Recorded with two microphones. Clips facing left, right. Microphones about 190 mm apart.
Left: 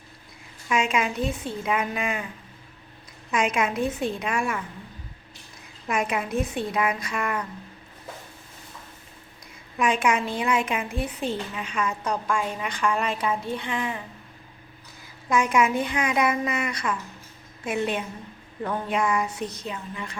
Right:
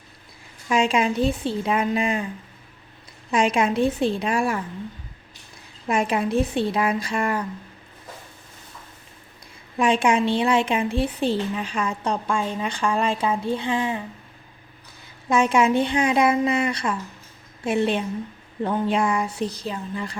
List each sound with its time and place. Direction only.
0.7 s a woman's voice: 30° right (ahead or behind)
3.3 s a woman's voice: 30° right (ahead or behind)
5.9 s a woman's voice: 30° right (ahead or behind)
9.7 s a woman's voice: 30° right (ahead or behind)
15.3 s a woman's voice: 25° right (ahead or behind)